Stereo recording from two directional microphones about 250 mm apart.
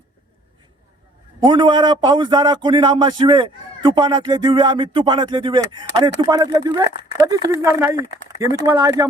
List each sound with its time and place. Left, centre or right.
1.5 s a man's voice: centre